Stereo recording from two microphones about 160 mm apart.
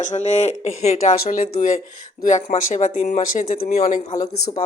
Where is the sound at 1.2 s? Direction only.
65° left (ahead or behind).